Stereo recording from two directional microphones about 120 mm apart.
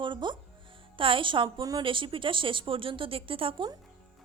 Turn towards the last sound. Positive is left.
turn(degrees=-45)  # may be behind; listen again after turning